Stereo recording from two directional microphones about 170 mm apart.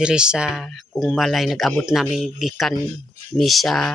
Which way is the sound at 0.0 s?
5° right (ahead or behind).